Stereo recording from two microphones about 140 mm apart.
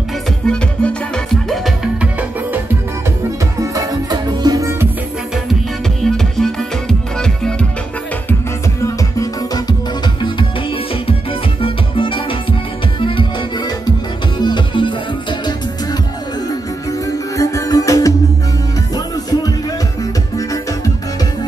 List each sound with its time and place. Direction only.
0.5 s music: 5° left (ahead or behind)
3.7 s music: 30° right (ahead or behind)
6.0 s music: 5° left (ahead or behind)
8.8 s music: 25° left (ahead or behind)
11.6 s music: 40° left (ahead or behind)
14.4 s music: 35° left (ahead or behind)
17.4 s music: 25° left (ahead or behind)